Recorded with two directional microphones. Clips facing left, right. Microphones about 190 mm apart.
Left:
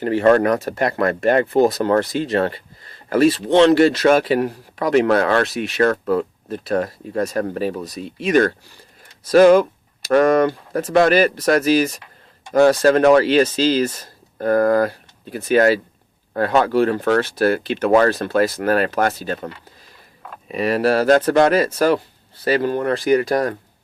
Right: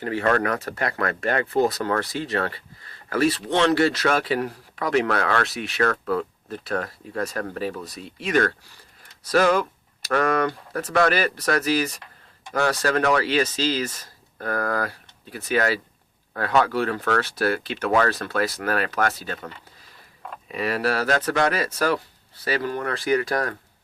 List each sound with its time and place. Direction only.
0.0 s speech: 25° left (ahead or behind)
18.3 s speech: 50° left (ahead or behind)
18.6 s speech: 25° left (ahead or behind)
20.5 s speech: 20° left (ahead or behind)